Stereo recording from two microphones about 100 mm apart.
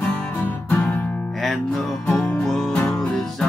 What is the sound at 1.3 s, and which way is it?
Music, centre (ahead or behind).